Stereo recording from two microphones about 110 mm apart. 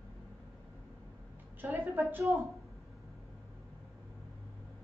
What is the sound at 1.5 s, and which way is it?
Speech, 15° right (ahead or behind).